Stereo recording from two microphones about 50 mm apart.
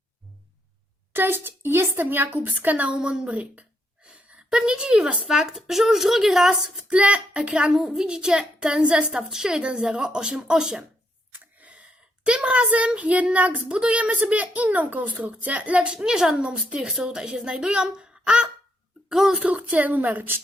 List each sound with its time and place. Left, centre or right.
1.1 s a woman's voice: right
2.9 s a woman's voice: centre
3.3 s a sound: right
4.5 s a woman's voice: centre
6.9 s a woman's voice: right
12.2 s a woman's voice: right
19.5 s a woman's voice: right